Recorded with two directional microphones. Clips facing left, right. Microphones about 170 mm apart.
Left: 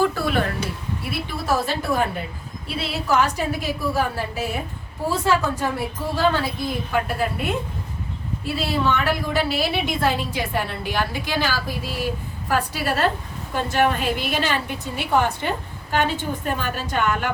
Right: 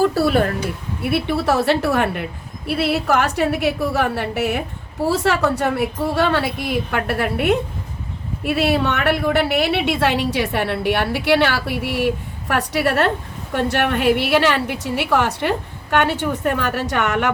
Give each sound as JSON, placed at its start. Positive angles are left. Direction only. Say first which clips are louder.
{"t": 0.0, "sound": "speech", "louder": "right 5 dB", "side_deg": -35}
{"t": 1.1, "sound": "a woman's voice", "louder": "right 6 dB", "side_deg": -65}